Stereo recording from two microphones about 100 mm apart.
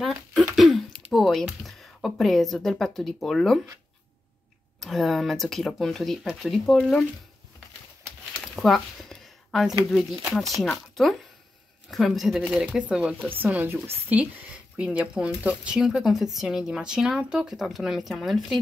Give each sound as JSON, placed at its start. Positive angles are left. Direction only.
{"t": 0.6, "sound": "speech", "side_deg": 0}
{"t": 4.7, "sound": "speech", "side_deg": 0}
{"t": 8.5, "sound": "speech", "side_deg": 0}